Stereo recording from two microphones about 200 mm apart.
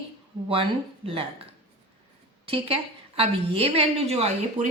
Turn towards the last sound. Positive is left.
turn(degrees=-30)  # may be behind; listen again after turning